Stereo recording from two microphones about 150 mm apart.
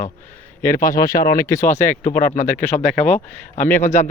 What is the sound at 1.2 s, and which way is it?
Speech, 20° left (ahead or behind).